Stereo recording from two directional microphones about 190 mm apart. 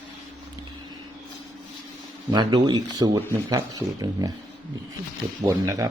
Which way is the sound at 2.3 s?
20° right (ahead or behind).